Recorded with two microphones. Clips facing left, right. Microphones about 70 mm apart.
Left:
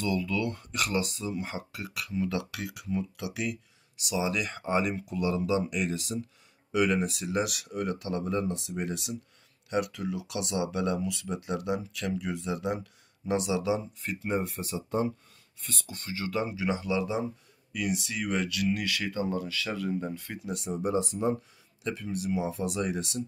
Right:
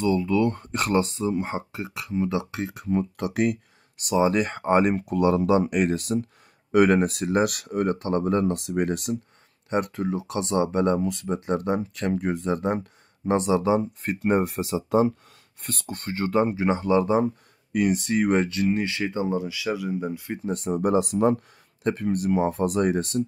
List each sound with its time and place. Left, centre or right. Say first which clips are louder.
0.0 s speech: right 8 dB; right
2.9 s speech: right 7 dB; right
9.7 s speech: right 5 dB; right
15.6 s speech: right 8 dB; right; by 20.3 s centre
20.3 s speech: right 9 dB; right
21.8 s speech: right 8 dB; right